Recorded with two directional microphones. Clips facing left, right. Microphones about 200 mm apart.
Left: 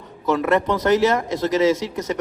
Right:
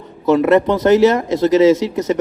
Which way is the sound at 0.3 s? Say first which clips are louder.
Right 7 dB; 25° right (ahead or behind).